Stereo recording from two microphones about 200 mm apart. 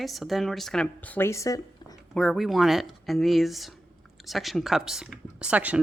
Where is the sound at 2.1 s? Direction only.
Centre (ahead or behind).